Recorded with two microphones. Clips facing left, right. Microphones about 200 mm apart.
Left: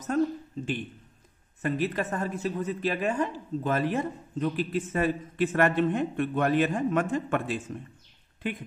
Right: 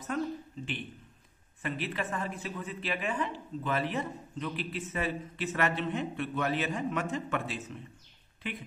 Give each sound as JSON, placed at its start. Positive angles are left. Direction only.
{"t": 0.1, "sound": "speech", "side_deg": 40}
{"t": 1.6, "sound": "speech", "side_deg": 45}